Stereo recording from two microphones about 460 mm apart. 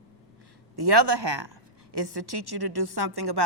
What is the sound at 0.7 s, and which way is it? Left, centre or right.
A woman's voice, right.